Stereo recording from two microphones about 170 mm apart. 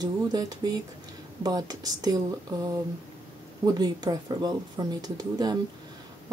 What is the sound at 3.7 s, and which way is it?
Speech, 25° right (ahead or behind).